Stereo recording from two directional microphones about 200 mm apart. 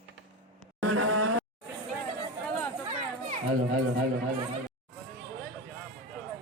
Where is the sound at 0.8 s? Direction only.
80° right.